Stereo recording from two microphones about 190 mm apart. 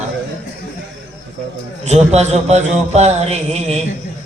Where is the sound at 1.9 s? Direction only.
35° right (ahead or behind).